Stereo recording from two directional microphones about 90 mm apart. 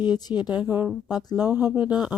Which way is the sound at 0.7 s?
25° right (ahead or behind).